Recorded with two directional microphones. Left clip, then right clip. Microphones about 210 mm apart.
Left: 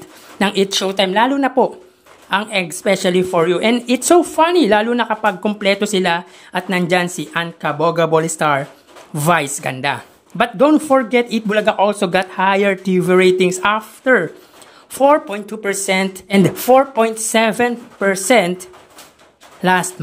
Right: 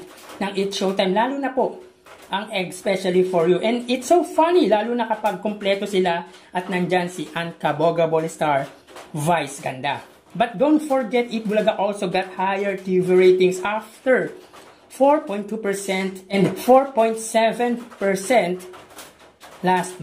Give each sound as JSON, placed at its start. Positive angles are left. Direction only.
{"t": 0.4, "sound": "speech", "side_deg": 30}